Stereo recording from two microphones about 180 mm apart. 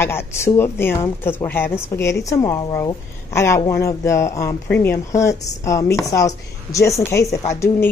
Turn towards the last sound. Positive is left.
turn(degrees=15)  # may be behind; listen again after turning